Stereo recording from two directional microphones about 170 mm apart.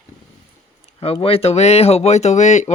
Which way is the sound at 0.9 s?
35° left (ahead or behind).